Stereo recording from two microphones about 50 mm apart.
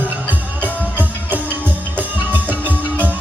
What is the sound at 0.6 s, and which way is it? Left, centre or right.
Music, right.